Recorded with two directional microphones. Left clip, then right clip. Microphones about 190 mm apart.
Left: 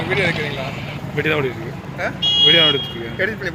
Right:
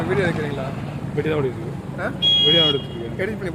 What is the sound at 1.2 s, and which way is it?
Speech, 5° right (ahead or behind).